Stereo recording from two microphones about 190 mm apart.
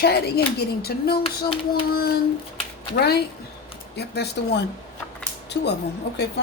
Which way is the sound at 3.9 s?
60° left (ahead or behind).